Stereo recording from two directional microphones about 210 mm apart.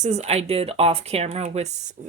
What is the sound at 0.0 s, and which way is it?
Speech, 35° right (ahead or behind).